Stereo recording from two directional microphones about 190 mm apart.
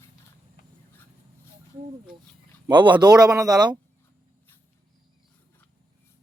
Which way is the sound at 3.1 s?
5° right (ahead or behind).